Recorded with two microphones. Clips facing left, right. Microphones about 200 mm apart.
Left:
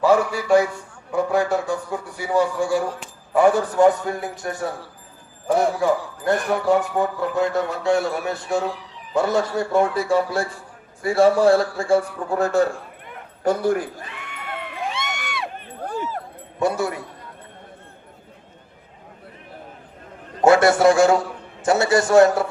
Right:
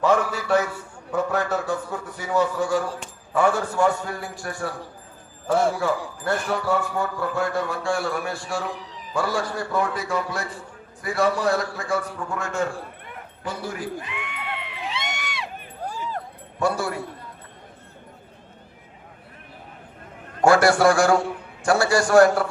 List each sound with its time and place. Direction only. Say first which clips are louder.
0.0 s a man's voice: left 3 dB; 10° left (ahead or behind); by 12.6 s 35° left (ahead or behind)
13.4 s a man's voice: left 11 dB; 50° left (ahead or behind)
14.1 s crowd: right 1 dB; 40° left (ahead or behind)
16.6 s a man's voice: left 2 dB; 20° left (ahead or behind)
20.4 s a man's voice: left 2 dB; 20° left (ahead or behind)